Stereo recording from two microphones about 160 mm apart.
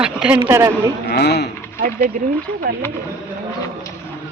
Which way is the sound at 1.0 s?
90° left.